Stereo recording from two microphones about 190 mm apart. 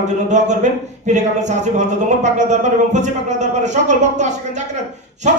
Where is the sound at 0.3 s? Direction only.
40° right (ahead or behind).